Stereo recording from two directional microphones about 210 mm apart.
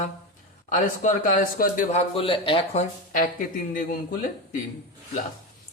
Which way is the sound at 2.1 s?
25° left (ahead or behind).